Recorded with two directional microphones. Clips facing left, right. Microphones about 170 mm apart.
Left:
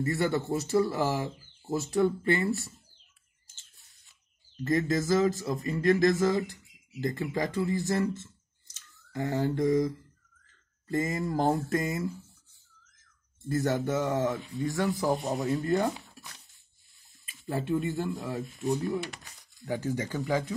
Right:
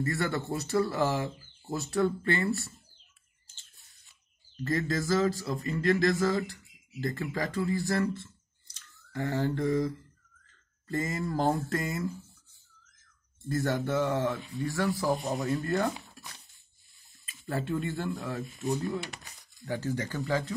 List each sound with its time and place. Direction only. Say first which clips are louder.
0.1 s speech: left 3 dB; 15° left (ahead or behind)
4.6 s speech: left 3 dB; 20° left (ahead or behind)
13.6 s speech: left 1 dB; 20° left (ahead or behind)
17.3 s speech: left 2 dB; 15° left (ahead or behind)